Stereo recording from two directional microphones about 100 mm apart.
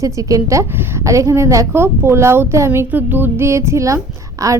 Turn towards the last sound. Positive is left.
turn(degrees=-35)  # may be behind; listen again after turning